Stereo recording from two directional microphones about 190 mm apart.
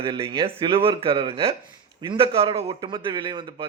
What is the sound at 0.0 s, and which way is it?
Speech, 30° right (ahead or behind).